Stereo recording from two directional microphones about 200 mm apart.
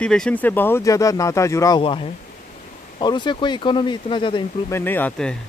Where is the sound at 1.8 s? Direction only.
25° left (ahead or behind).